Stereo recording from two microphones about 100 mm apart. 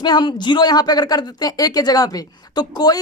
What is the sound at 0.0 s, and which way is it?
A woman's voice, 50° left (ahead or behind).